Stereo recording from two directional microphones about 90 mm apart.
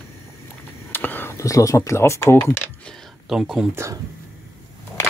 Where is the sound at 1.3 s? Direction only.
40° left (ahead or behind).